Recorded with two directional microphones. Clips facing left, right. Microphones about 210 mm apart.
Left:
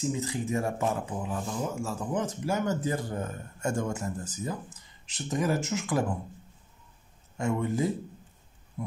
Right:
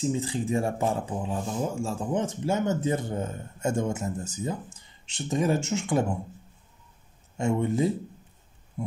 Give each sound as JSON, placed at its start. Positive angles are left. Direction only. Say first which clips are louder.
{"t": 0.0, "sound": "speech", "louder": "right 3 dB", "side_deg": -30}
{"t": 7.3, "sound": "speech", "louder": "right 3 dB", "side_deg": -25}
{"t": 8.8, "sound": "a sound", "louder": "right 3 dB", "side_deg": -25}